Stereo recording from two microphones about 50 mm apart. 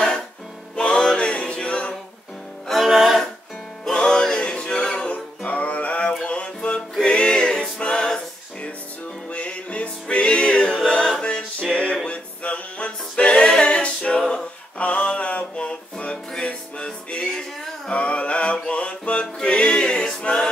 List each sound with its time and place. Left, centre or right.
0.7 s music: centre
2.7 s music: centre
3.8 s music: centre
7.0 s a capella: centre
9.3 s music: left